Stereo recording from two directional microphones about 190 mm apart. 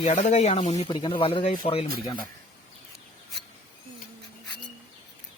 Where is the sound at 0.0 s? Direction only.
35° left (ahead or behind).